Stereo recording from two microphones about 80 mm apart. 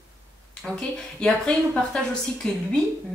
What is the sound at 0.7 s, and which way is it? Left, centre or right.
A woman's voice, centre.